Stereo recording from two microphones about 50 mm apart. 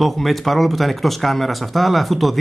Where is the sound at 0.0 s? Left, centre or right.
Centre.